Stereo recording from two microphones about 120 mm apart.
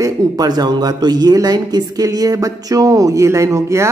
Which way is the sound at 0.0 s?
30° right (ahead or behind).